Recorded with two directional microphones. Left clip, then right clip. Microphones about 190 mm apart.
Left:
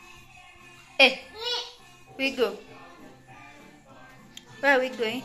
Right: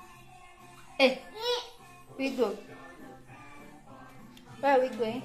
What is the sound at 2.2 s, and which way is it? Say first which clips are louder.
Music: left 4 dB; centre (ahead or behind).